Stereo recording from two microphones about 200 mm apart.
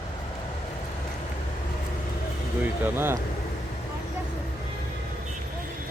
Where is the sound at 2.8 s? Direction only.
10° right (ahead or behind).